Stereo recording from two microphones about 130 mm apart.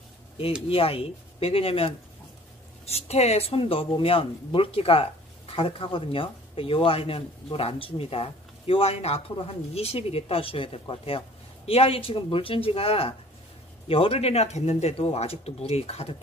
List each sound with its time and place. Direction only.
0.7 s speech: 45° left (ahead or behind)